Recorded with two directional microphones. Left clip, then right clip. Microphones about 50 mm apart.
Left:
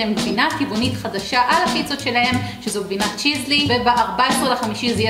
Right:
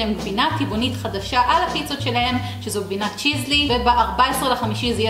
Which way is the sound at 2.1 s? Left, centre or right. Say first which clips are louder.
Left 3 dB; right.